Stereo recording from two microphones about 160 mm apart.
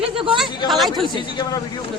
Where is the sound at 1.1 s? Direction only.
25° left (ahead or behind).